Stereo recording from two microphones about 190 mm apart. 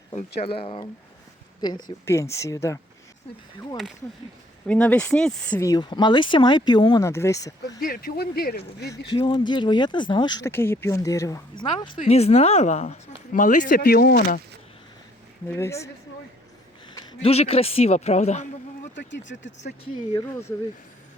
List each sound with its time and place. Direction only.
0.3 s speech: 30° left (ahead or behind)
1.6 s speech: 20° left (ahead or behind)
4.6 s speech: 5° left (ahead or behind)
5.5 s speech: 20° left (ahead or behind)
7.8 s speech: 50° left (ahead or behind)
9.0 s speech: 25° left (ahead or behind); by 14.4 s 50° left (ahead or behind)
15.4 s speech: 15° left (ahead or behind)
17.2 s a man's voice: 30° left (ahead or behind)
18.9 s speech: 70° left (ahead or behind)